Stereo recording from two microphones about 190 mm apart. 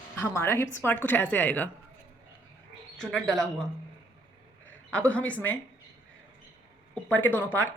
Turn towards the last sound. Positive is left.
turn(degrees=10)  # may be behind; listen again after turning